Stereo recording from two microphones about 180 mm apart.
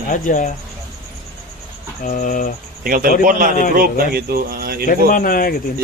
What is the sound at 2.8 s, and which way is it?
Speech, 50° right (ahead or behind).